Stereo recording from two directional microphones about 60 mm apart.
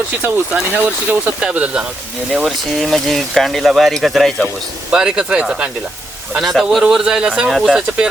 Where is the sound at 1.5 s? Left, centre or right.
Right.